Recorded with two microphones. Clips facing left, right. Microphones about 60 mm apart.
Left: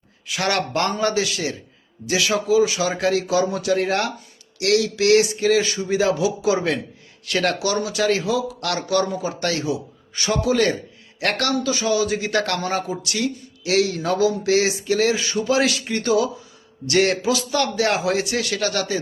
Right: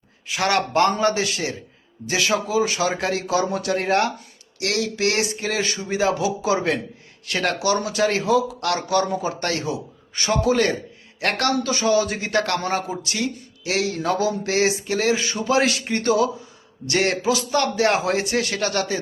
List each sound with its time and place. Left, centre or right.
0.3 s a man's voice: right
7.9 s a man's voice: right
11.6 s a man's voice: right